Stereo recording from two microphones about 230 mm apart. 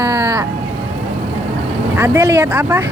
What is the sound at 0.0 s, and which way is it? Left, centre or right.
Vehicle, centre.